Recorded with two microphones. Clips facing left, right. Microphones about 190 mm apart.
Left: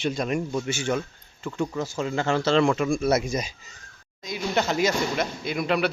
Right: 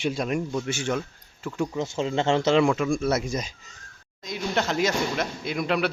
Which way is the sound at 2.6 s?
Centre (ahead or behind).